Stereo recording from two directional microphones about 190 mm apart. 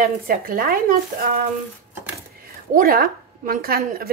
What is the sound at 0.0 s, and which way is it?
A woman's voice, 50° right (ahead or behind).